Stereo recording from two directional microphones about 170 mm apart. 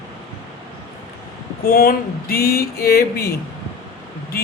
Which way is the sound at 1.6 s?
60° left (ahead or behind).